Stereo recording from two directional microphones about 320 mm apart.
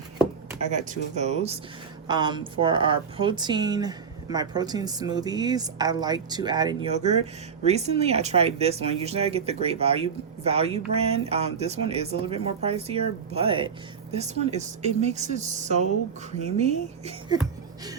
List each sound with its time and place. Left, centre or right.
0.6 s speech: right